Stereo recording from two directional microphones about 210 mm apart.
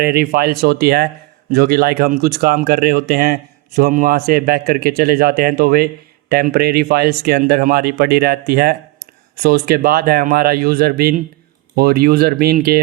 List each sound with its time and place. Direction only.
0.0 s a man's voice: 45° right (ahead or behind)